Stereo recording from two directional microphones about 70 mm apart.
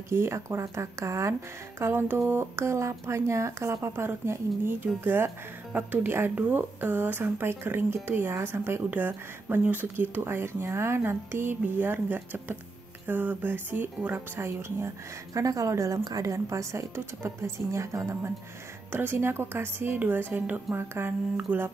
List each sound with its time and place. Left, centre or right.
0.1 s speech: right
15.3 s speech: right
16.0 s speech: right
18.9 s speech: right